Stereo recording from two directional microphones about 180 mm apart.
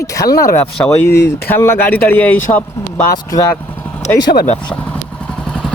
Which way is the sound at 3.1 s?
20° left (ahead or behind).